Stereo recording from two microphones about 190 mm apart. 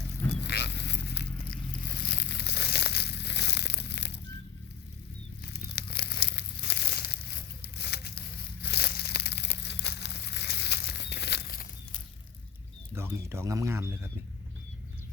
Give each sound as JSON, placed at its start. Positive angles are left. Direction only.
{"t": 0.4, "sound": "a sound", "side_deg": 65}
{"t": 2.0, "sound": "crushing", "side_deg": 60}
{"t": 5.5, "sound": "crumpling", "side_deg": 55}
{"t": 7.8, "sound": "a sound", "side_deg": 60}
{"t": 8.6, "sound": "crushing", "side_deg": 60}
{"t": 12.9, "sound": "speech", "side_deg": -15}